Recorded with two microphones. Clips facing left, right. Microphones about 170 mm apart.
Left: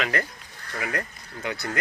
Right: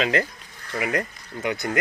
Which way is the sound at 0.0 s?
20° right (ahead or behind).